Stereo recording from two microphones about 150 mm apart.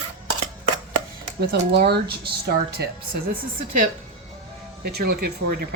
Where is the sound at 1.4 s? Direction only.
90° right.